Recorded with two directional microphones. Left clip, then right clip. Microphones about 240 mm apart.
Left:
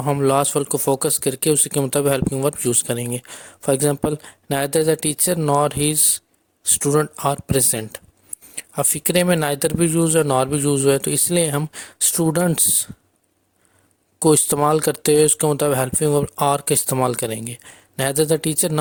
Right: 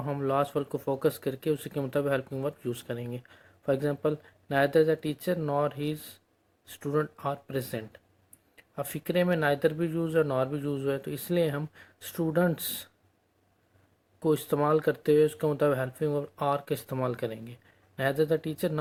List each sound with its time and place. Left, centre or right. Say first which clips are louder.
0.0 s speech: left 10 dB; left
14.2 s speech: left 10 dB; left